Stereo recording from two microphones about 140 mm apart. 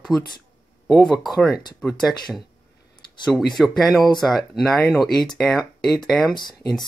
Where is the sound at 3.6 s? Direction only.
Centre (ahead or behind).